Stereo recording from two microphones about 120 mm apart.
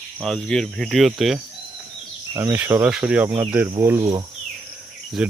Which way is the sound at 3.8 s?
25° right (ahead or behind).